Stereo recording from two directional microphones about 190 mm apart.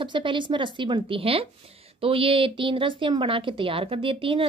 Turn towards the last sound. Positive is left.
turn(degrees=-30)  # may be behind; listen again after turning